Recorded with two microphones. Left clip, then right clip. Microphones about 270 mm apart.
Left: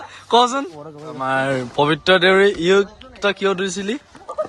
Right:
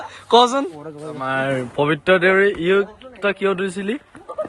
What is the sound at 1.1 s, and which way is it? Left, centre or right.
Speech, centre.